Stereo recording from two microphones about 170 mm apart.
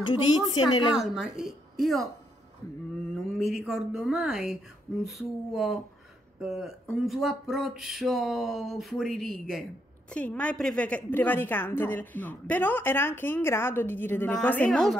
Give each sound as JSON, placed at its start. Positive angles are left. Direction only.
{"t": 0.0, "sound": "a woman's voice", "side_deg": 25}
{"t": 0.9, "sound": "speech", "side_deg": -5}
{"t": 3.3, "sound": "a woman's voice", "side_deg": 0}